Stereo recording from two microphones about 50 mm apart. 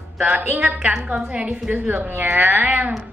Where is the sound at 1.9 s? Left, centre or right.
Right.